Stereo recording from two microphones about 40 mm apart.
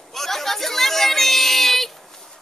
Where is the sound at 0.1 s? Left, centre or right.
Centre.